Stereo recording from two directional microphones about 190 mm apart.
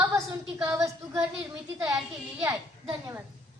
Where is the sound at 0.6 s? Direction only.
15° right (ahead or behind).